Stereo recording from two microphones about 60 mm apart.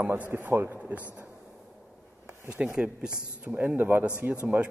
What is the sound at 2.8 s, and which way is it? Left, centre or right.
A man's voice, right.